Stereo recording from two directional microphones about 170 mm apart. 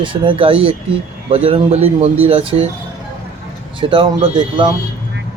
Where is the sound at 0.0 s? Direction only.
30° right (ahead or behind).